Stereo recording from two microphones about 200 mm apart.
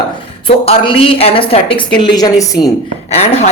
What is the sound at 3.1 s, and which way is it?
Speech, 30° left (ahead or behind).